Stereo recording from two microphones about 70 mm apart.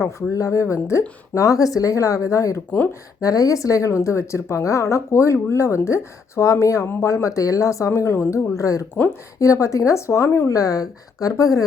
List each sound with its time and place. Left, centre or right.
0.0 s speech: left
8.5 s a woman's voice: left
10.5 s a woman's voice: left